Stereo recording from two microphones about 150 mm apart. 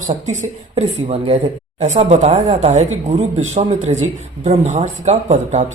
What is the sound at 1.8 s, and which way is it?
Speech, 50° right (ahead or behind).